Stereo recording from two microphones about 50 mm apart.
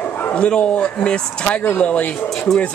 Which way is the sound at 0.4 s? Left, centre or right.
Left.